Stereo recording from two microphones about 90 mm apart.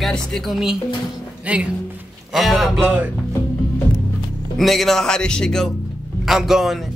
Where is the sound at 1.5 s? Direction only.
15° right (ahead or behind).